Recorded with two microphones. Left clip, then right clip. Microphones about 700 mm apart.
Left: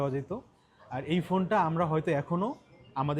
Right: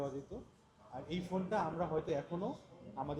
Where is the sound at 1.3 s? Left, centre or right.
Left.